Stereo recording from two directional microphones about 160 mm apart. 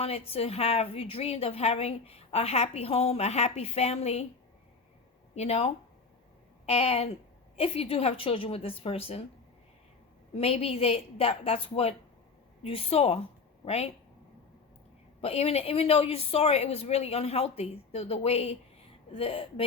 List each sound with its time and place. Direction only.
0.0 s a woman's voice: 40° left (ahead or behind)
5.3 s a woman's voice: 40° left (ahead or behind)
10.3 s a woman's voice: 40° left (ahead or behind)
15.2 s a woman's voice: 40° left (ahead or behind)